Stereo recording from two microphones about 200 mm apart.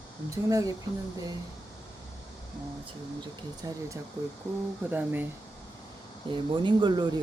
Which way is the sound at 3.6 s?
15° right (ahead or behind).